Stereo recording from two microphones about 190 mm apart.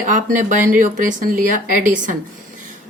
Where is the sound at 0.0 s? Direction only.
40° right (ahead or behind).